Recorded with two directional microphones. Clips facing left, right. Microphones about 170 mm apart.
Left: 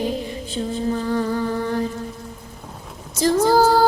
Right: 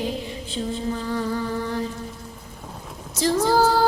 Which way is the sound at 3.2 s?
45° left (ahead or behind).